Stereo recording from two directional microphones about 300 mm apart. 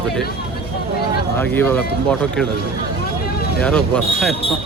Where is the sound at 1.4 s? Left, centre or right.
Centre.